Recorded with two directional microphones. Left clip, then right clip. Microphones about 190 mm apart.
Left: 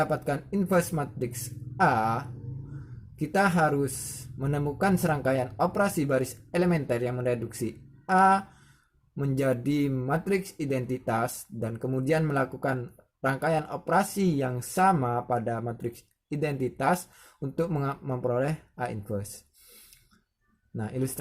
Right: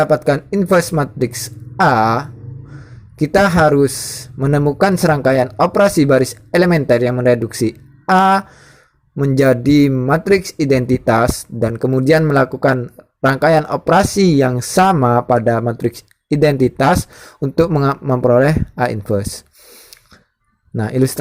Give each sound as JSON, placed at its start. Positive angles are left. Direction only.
{"t": 0.0, "sound": "speech", "side_deg": -35}
{"t": 20.7, "sound": "speech", "side_deg": -40}